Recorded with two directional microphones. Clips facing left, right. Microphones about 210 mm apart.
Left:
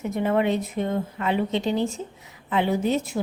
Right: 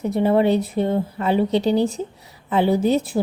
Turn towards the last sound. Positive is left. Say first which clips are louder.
# right 5 dB
turn(degrees=-35)  # may be behind; listen again after turning